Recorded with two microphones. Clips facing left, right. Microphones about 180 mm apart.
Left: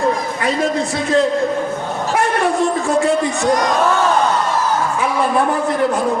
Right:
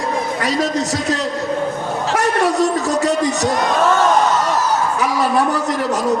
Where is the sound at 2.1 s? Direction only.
40° right (ahead or behind).